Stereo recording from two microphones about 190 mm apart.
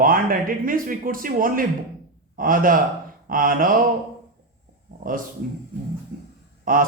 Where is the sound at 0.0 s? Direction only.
50° right (ahead or behind).